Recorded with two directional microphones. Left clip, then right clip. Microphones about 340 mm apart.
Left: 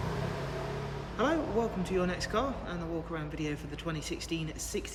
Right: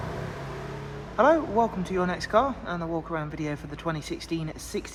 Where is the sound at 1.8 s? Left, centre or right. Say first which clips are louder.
Right 4 dB; centre.